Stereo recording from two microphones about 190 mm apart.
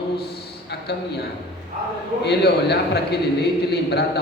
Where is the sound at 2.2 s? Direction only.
60° left (ahead or behind).